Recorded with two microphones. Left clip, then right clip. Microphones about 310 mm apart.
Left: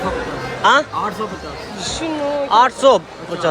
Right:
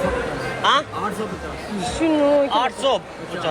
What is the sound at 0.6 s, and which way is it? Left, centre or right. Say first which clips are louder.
Speech: left 5 dB; centre.